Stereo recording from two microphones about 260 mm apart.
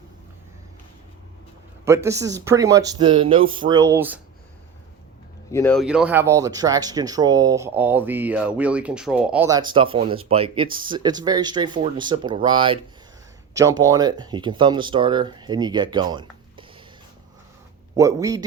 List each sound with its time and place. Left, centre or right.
1.8 s speech: centre
5.5 s speech: centre
17.9 s speech: centre